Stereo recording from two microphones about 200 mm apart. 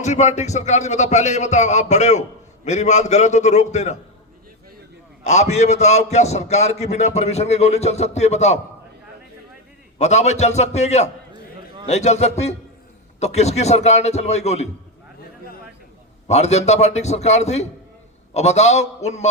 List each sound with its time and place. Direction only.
0.0 s a man's voice: 35° left (ahead or behind)
5.2 s a man's voice: 35° left (ahead or behind)
10.0 s a man's voice: 35° left (ahead or behind)
16.2 s a man's voice: 35° left (ahead or behind)